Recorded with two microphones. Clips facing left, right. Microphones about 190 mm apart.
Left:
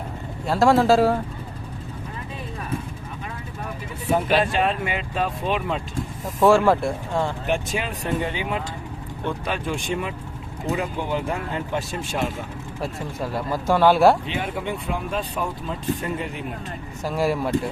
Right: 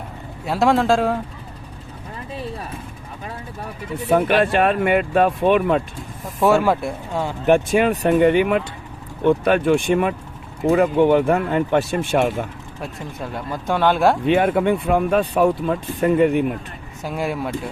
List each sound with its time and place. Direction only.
0.4 s speech: centre (ahead or behind)
4.1 s speech: 60° right (ahead or behind)
6.4 s speech: centre (ahead or behind)
7.4 s speech: 55° right (ahead or behind)
12.8 s speech: 5° left (ahead or behind)
14.3 s speech: 55° right (ahead or behind)
17.0 s speech: centre (ahead or behind)